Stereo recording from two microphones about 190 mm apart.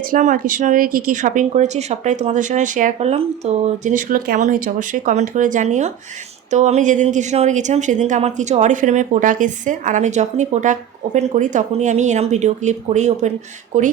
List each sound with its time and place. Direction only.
0.1 s a woman's voice: 45° right (ahead or behind)